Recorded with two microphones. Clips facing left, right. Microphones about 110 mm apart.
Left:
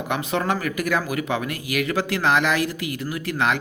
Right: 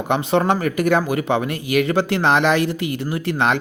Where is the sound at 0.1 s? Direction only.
30° right (ahead or behind).